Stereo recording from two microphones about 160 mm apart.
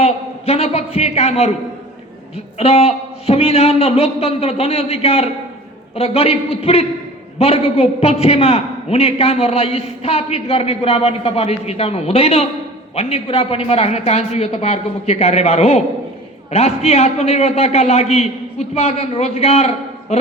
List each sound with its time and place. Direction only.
0.0 s a man's voice: 40° left (ahead or behind)
2.6 s a man's voice: 40° left (ahead or behind)